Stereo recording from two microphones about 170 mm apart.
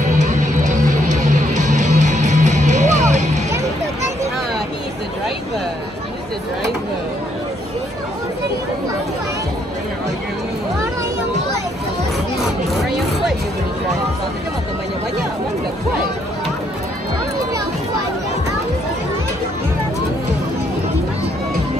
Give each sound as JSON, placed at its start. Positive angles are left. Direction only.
{"t": 0.2, "sound": "music", "side_deg": -45}